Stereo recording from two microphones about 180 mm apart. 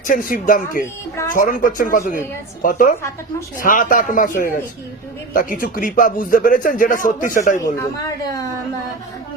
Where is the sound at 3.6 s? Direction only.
50° left (ahead or behind).